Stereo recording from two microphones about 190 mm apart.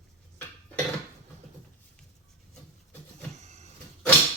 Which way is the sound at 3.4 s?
35° right (ahead or behind).